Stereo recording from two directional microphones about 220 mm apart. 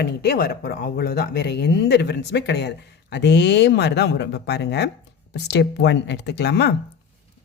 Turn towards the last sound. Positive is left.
turn(degrees=50)  # may be behind; listen again after turning